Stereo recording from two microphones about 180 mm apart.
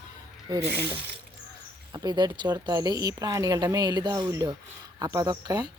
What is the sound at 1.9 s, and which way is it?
A woman's voice, 25° right (ahead or behind).